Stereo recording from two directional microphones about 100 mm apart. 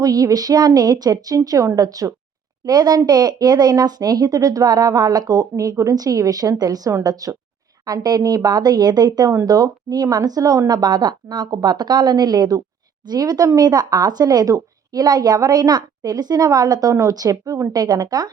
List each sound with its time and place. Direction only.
0.0 s a woman's voice: 40° right (ahead or behind)